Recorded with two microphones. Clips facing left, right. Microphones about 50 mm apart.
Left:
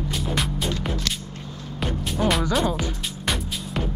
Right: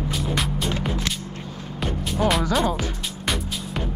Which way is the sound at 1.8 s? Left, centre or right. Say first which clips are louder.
Right 1 dB; centre.